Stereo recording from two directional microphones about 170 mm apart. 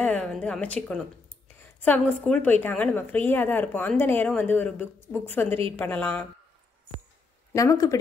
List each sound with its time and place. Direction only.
0.0 s a woman's voice: 5° left (ahead or behind)
7.5 s speech: 20° left (ahead or behind)